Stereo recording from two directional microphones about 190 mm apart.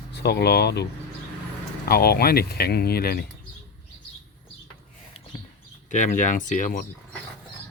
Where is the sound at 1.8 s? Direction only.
55° left (ahead or behind).